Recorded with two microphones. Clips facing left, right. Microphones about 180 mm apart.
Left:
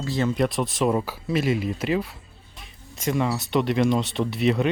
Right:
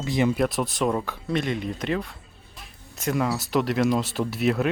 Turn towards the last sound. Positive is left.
turn(degrees=0)  # may be behind; listen again after turning